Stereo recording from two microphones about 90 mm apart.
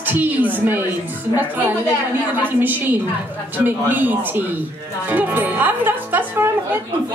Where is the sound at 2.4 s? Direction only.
20° right (ahead or behind).